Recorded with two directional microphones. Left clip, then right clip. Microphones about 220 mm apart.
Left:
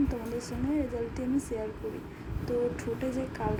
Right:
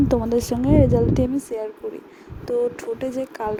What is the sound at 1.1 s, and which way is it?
A woman's voice, 35° right (ahead or behind).